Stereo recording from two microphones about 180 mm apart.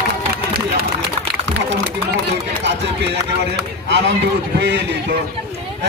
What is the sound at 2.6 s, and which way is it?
A man's voice, 70° right (ahead or behind).